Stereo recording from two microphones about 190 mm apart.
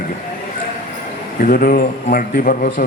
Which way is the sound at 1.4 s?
50° left (ahead or behind).